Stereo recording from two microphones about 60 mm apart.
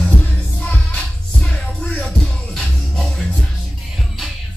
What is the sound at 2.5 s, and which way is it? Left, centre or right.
Music, centre.